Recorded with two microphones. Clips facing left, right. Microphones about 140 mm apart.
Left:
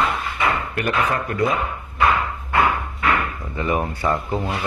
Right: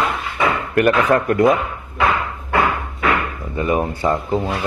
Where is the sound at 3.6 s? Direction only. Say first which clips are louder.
Right 4 dB; 25° right (ahead or behind).